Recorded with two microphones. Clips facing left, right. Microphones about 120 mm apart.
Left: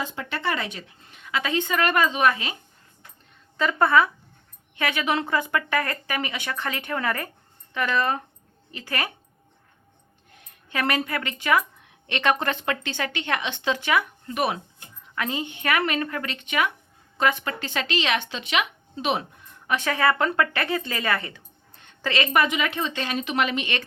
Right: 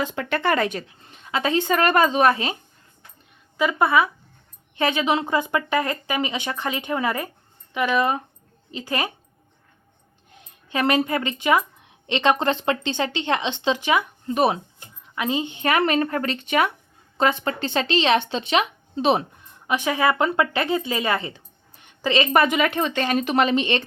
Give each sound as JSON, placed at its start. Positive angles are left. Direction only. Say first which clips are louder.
{"t": 0.0, "sound": "speech", "louder": "right 5 dB", "side_deg": -65}
{"t": 1.1, "sound": "speech", "louder": "right 4 dB", "side_deg": -30}
{"t": 3.6, "sound": "speech", "louder": "right 1 dB", "side_deg": -10}
{"t": 4.8, "sound": "speech", "louder": "right 4 dB", "side_deg": -25}
{"t": 10.4, "sound": "a woman's voice", "louder": "right 4 dB", "side_deg": -20}
{"t": 19.6, "sound": "speech", "louder": "right 2 dB", "side_deg": -15}
{"t": 20.9, "sound": "a sound", "louder": "right 3 dB", "side_deg": -20}
{"t": 22.3, "sound": "speech", "louder": "right 3 dB", "side_deg": -40}